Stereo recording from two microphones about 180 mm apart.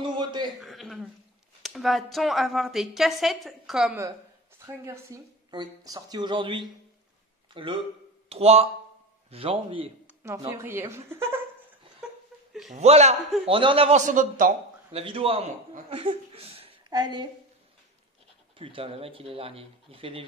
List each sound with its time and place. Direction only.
0.0 s a man's voice: 25° right (ahead or behind)
0.6 s a woman's voice: centre (ahead or behind)
4.6 s a woman's voice: 15° right (ahead or behind)
10.5 s speech: 15° right (ahead or behind)
12.7 s speech: 35° right (ahead or behind)
14.0 s a man's voice: 45° right (ahead or behind)
14.9 s a woman's voice: 30° right (ahead or behind)
18.6 s speech: 30° right (ahead or behind)